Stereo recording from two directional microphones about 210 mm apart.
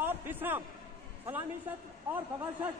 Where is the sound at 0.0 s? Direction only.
10° right (ahead or behind).